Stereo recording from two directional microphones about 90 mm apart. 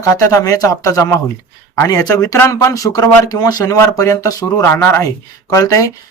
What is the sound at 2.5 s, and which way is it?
Speech, 40° left (ahead or behind).